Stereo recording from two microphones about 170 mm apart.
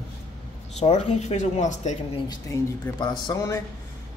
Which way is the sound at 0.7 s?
40° left (ahead or behind).